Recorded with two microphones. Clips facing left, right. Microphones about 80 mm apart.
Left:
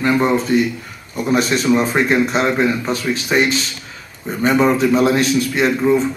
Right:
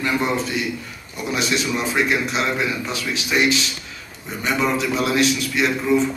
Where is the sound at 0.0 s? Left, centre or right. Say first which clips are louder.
Left 6 dB; left.